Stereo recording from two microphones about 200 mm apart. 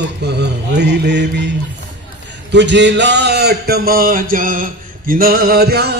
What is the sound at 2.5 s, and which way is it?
Speech, 60° right (ahead or behind).